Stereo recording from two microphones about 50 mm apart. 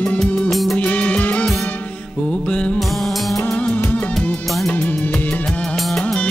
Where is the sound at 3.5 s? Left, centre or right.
Left.